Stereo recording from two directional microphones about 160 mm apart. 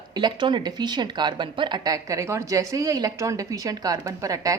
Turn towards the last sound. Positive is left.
turn(degrees=-20)  # may be behind; listen again after turning